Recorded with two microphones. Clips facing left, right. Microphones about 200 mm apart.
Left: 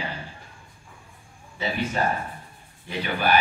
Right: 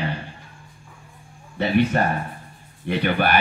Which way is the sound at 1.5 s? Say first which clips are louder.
Right 7 dB; 60° right (ahead or behind).